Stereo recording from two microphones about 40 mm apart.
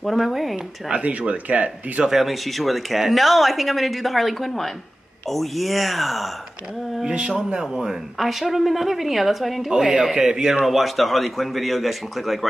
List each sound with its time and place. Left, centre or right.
0.0 s speech: centre
1.0 s speech: right
2.0 s speech: centre
7.1 s speech: right; by 9.7 s centre
10.1 s speech: centre
10.6 s speech: centre